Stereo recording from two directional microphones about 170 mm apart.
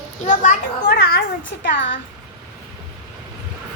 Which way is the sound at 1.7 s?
90° left.